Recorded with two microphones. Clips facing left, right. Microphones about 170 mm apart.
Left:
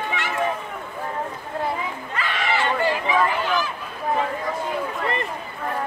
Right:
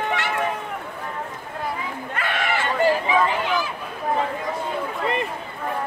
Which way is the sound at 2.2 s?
55° right (ahead or behind).